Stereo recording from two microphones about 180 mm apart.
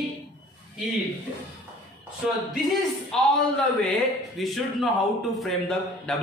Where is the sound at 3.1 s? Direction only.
5° left (ahead or behind).